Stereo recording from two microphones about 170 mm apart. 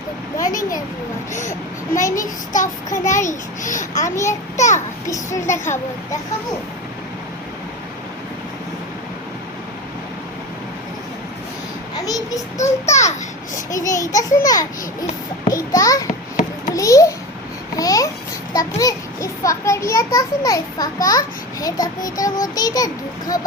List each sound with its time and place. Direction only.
0.3 s a child's voice: 20° left (ahead or behind)
1.3 s a child's voice: 45° left (ahead or behind)
1.9 s a child's voice: 20° left (ahead or behind)
3.2 s a child's voice: 45° left (ahead or behind)
4.1 s a child's voice: 15° left (ahead or behind)
4.5 s a child's voice: 45° left (ahead or behind)
5.0 s a child's voice: 20° left (ahead or behind)
12.0 s child singing: 20° left (ahead or behind)
12.8 s a child's voice: 15° left (ahead or behind)
17.7 s babbling: 20° left (ahead or behind)
18.8 s a child's voice: 20° left (ahead or behind)